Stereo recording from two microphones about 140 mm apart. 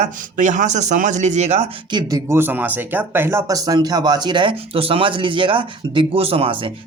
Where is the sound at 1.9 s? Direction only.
25° right (ahead or behind).